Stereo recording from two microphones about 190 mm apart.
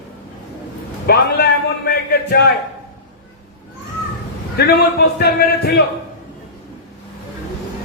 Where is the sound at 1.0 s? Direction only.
55° left (ahead or behind).